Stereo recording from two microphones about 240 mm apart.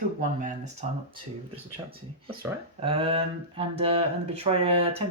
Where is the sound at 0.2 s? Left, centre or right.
Right.